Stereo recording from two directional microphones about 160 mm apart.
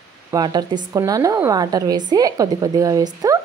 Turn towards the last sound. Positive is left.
turn(degrees=-20)  # may be behind; listen again after turning